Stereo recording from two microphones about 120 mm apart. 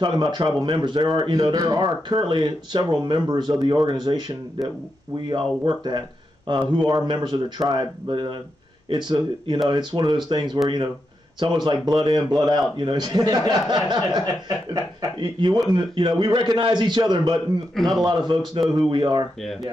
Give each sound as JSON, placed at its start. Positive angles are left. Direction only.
{"t": 0.0, "sound": "speech", "side_deg": -40}
{"t": 5.3, "sound": "speech", "side_deg": -40}
{"t": 17.7, "sound": "speech", "side_deg": 0}
{"t": 18.0, "sound": "speech", "side_deg": -40}
{"t": 19.4, "sound": "speech", "side_deg": 0}